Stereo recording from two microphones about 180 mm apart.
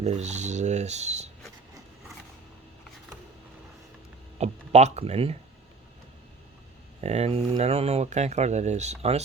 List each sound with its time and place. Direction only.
0.0 s speech: 35° right (ahead or behind)
4.4 s speech: 40° right (ahead or behind)
7.0 s speech: 35° right (ahead or behind)